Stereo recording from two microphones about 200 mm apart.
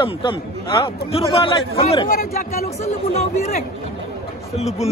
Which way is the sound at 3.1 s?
35° left (ahead or behind).